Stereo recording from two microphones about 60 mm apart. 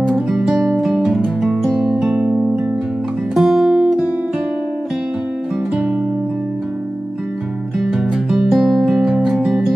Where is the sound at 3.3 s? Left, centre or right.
Centre.